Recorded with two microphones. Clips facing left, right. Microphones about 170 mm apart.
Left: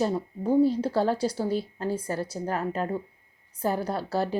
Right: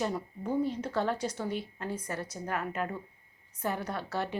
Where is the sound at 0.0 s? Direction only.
35° left (ahead or behind).